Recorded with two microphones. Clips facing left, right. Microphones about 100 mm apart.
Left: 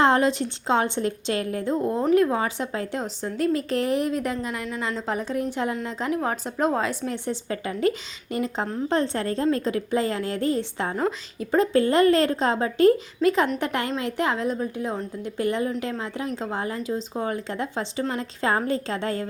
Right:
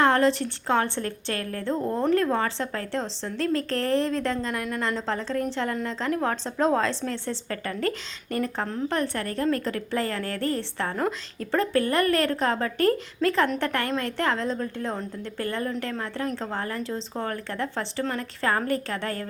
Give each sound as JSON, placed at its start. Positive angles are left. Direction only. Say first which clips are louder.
{"t": 0.0, "sound": "a woman's voice", "louder": "left 1 dB", "side_deg": 20}